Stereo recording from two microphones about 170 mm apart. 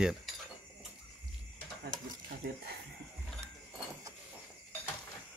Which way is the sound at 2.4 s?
65° right (ahead or behind).